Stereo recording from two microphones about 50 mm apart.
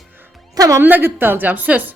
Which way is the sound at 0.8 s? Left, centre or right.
Right.